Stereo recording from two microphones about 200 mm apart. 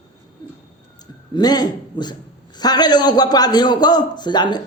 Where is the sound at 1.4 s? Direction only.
20° left (ahead or behind).